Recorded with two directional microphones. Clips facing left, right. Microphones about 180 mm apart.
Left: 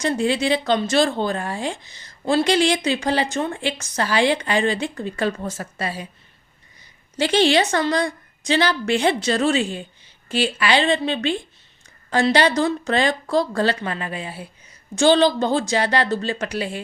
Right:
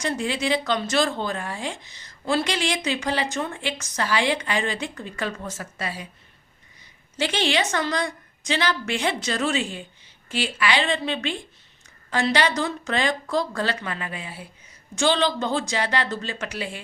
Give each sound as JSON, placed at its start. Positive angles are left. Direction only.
{"t": 0.0, "sound": "a woman's voice", "side_deg": 30}
{"t": 7.2, "sound": "a woman's voice", "side_deg": 35}